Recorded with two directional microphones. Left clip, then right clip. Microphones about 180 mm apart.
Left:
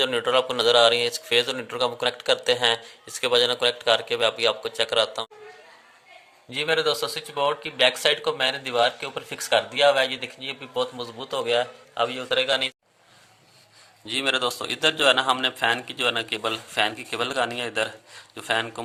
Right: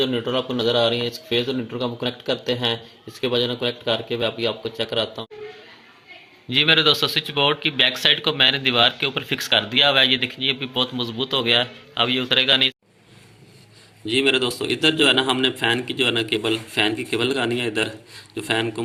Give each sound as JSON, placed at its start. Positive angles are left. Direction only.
{"t": 0.0, "sound": "a man's voice", "side_deg": 15}
{"t": 6.5, "sound": "a man's voice", "side_deg": 10}
{"t": 14.0, "sound": "a man's voice", "side_deg": 55}